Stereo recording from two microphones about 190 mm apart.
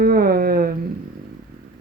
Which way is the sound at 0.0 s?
55° right (ahead or behind).